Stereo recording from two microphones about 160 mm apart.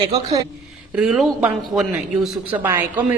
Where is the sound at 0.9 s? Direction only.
5° right (ahead or behind).